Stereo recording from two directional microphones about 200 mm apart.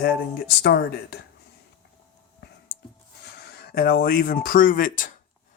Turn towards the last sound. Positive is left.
turn(degrees=40)  # may be behind; listen again after turning